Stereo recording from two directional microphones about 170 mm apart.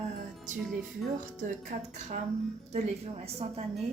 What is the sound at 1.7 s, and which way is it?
Speech, 50° right (ahead or behind).